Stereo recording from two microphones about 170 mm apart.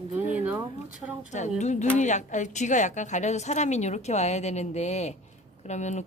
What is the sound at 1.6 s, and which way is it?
A woman's voice, 45° left (ahead or behind).